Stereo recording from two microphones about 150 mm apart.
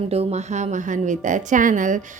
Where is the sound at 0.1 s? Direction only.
45° right (ahead or behind).